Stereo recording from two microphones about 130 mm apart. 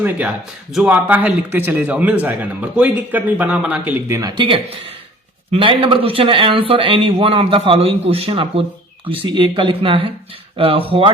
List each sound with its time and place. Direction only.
0.7 s a man's voice: 5° right (ahead or behind)
4.1 s speech: 30° right (ahead or behind); by 11.1 s 45° right (ahead or behind)